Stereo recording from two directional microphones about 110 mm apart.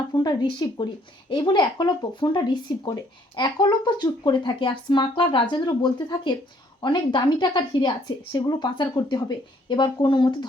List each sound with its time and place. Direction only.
0.1 s a woman's voice: 40° left (ahead or behind)